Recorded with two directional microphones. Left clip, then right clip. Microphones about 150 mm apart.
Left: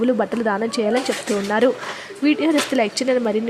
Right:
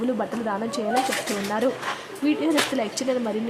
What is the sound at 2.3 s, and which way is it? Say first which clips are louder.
Speech: left 4 dB; 30° left (ahead or behind).